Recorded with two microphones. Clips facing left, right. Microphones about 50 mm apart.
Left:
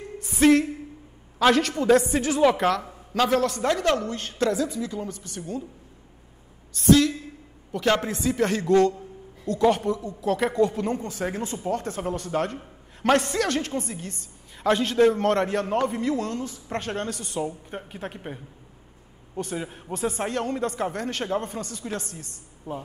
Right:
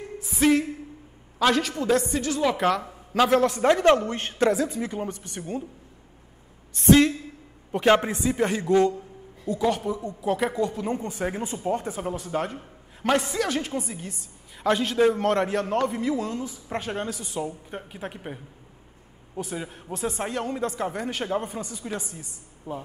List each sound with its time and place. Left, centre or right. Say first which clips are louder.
0.2 s music: left 3 dB; centre
1.4 s a woman's voice: left 2 dB; centre
2.5 s speech: even; centre
3.7 s a woman's voice: right 4 dB; right
6.7 s a man's voice: right 1 dB; right
9.6 s a woman's voice: left 4 dB; centre
10.9 s a man's voice: even; centre